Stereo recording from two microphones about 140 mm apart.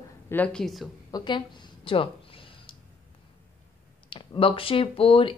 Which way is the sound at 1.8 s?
40° left (ahead or behind).